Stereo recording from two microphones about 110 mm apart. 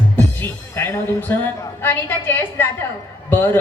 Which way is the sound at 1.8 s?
20° left (ahead or behind).